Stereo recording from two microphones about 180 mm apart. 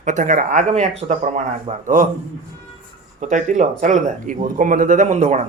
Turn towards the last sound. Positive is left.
turn(degrees=-40)  # may be behind; listen again after turning